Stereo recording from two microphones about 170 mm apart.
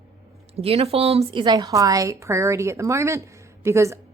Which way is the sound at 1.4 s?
20° right (ahead or behind).